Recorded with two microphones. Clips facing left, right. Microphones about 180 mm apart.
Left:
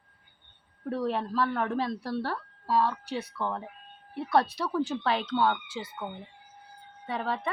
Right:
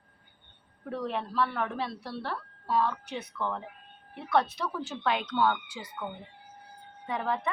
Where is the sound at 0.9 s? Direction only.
40° left (ahead or behind).